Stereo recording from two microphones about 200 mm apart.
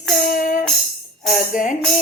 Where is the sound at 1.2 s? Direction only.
40° left (ahead or behind).